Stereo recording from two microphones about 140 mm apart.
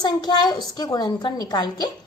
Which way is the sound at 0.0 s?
30° left (ahead or behind).